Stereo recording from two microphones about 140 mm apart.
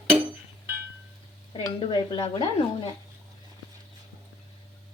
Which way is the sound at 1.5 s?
35° left (ahead or behind).